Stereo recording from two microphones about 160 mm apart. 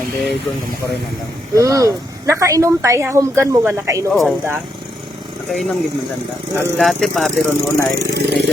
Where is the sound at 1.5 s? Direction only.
20° right (ahead or behind).